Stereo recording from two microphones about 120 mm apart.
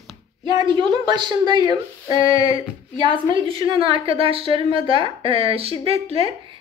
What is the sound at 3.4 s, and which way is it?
A woman's voice, 50° right (ahead or behind).